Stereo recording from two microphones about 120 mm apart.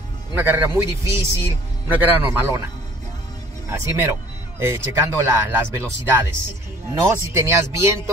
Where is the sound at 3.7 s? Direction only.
20° right (ahead or behind).